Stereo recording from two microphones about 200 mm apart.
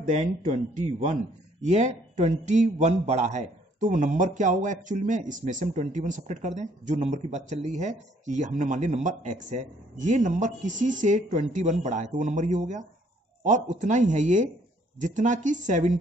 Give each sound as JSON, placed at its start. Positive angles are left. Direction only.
{"t": 0.0, "sound": "a man's voice", "side_deg": -40}